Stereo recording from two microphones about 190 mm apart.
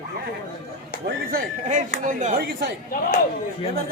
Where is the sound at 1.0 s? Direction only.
50° right (ahead or behind).